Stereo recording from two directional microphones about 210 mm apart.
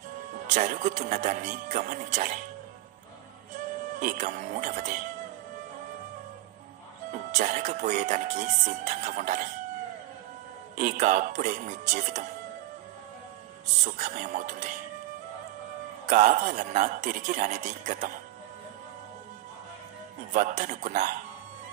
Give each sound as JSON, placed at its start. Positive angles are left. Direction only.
{"t": 0.5, "sound": "speech", "side_deg": -35}
{"t": 4.0, "sound": "speech", "side_deg": -40}
{"t": 7.3, "sound": "speech", "side_deg": -35}
{"t": 10.8, "sound": "speech", "side_deg": -35}
{"t": 13.8, "sound": "speech", "side_deg": -35}
{"t": 16.1, "sound": "speech", "side_deg": -35}
{"t": 20.2, "sound": "speech", "side_deg": -35}